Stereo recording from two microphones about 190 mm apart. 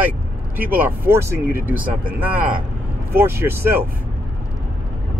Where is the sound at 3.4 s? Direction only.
10° right (ahead or behind).